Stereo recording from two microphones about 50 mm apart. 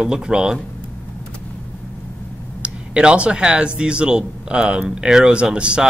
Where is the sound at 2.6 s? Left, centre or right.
Right.